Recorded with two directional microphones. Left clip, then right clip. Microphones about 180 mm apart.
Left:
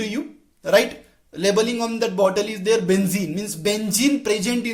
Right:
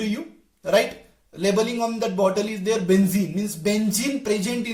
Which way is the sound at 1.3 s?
30° left (ahead or behind).